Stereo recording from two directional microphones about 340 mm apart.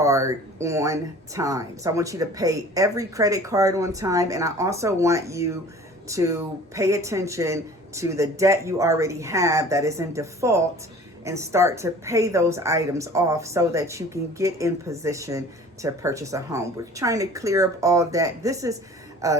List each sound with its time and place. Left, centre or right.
0.0 s a woman's voice: centre